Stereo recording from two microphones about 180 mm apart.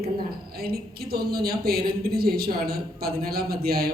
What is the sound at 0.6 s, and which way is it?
Speech, 60° right (ahead or behind).